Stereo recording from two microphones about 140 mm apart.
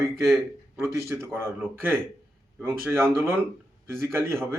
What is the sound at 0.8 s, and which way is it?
Speech, 20° right (ahead or behind).